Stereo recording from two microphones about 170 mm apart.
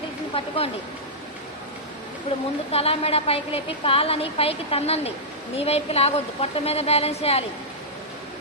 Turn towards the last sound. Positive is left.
turn(degrees=35)  # may be behind; listen again after turning